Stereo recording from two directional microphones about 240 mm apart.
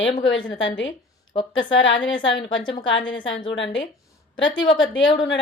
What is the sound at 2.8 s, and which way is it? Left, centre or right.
Speech, left.